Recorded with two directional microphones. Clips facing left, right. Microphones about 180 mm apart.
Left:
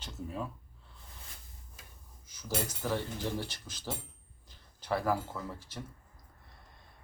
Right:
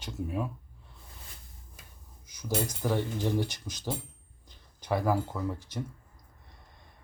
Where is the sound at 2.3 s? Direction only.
15° right (ahead or behind).